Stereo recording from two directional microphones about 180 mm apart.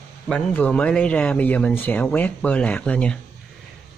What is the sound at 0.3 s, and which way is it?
Speech, 10° left (ahead or behind).